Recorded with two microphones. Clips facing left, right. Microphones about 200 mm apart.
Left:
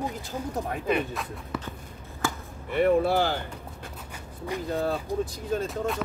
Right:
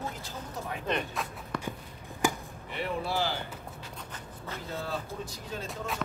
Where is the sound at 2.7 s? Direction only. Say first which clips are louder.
Left 11 dB; 55° left (ahead or behind).